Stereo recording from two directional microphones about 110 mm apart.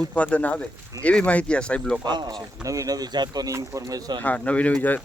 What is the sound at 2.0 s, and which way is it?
Speech, 40° right (ahead or behind).